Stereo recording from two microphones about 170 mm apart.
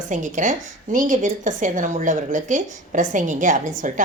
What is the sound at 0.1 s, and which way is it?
A woman's voice, 45° right (ahead or behind).